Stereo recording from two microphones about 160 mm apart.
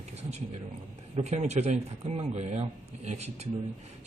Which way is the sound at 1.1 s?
45° right (ahead or behind).